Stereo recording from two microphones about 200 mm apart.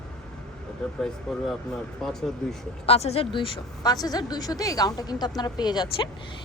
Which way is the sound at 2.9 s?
30° left (ahead or behind).